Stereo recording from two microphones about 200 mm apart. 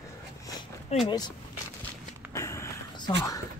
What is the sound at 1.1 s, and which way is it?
Speech, 20° left (ahead or behind).